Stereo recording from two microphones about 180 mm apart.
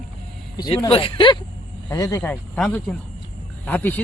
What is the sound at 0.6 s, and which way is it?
Speech, 25° left (ahead or behind).